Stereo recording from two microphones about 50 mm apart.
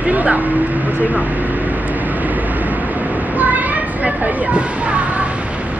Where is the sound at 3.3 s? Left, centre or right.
Right.